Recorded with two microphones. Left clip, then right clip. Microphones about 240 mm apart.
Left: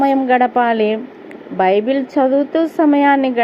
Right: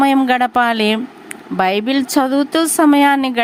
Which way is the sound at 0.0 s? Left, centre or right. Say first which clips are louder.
Even; right.